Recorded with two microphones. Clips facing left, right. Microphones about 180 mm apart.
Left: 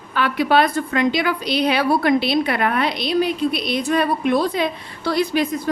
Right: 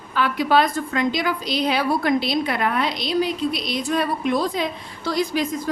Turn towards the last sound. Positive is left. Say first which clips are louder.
# left 3 dB
turn(degrees=65)  # may be behind; listen again after turning